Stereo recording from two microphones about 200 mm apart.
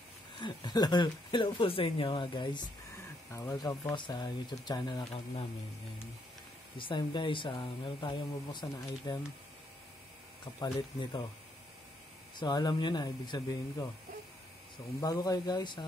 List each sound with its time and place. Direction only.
0.4 s speech: 20° left (ahead or behind)
6.8 s speech: 25° left (ahead or behind)
10.4 s speech: 20° left (ahead or behind)
12.4 s speech: 20° left (ahead or behind)
15.0 s speech: 15° left (ahead or behind)